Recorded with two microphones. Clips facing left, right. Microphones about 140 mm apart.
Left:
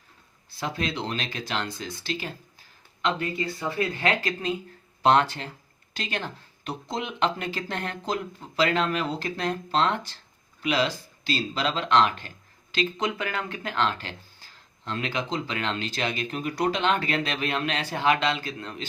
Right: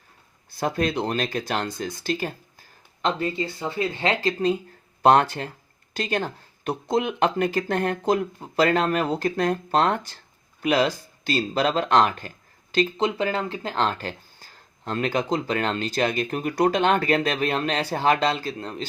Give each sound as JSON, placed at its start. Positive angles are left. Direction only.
{"t": 0.5, "sound": "speech", "side_deg": -45}
{"t": 3.0, "sound": "speech", "side_deg": -30}
{"t": 5.0, "sound": "speech", "side_deg": -45}
{"t": 13.0, "sound": "speech", "side_deg": -30}